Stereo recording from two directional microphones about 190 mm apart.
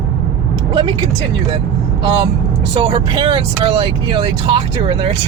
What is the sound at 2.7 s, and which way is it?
Speech, 25° right (ahead or behind).